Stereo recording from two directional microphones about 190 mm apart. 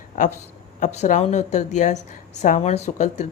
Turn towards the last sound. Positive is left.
turn(degrees=40)  # may be behind; listen again after turning